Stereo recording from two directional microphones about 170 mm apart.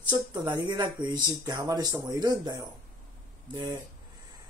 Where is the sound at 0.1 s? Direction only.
25° right (ahead or behind).